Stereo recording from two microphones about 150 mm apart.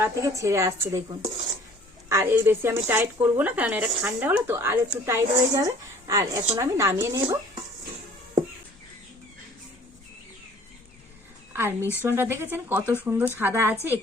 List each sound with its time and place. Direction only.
0.0 s speech: 20° right (ahead or behind)
2.0 s speech: 20° right (ahead or behind)
11.5 s a woman's voice: 15° right (ahead or behind)